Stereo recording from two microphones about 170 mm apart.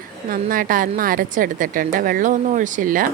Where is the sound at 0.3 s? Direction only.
55° right (ahead or behind).